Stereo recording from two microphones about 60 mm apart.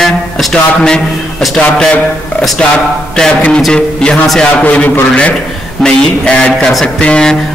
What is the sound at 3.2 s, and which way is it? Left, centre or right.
A man's voice, centre.